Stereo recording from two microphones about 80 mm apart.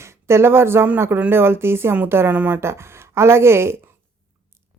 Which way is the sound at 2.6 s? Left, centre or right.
Right.